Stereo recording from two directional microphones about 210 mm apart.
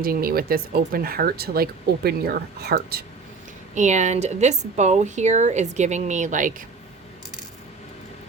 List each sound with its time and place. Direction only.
0.0 s speech: 45° right (ahead or behind)
3.8 s speech: 35° right (ahead or behind)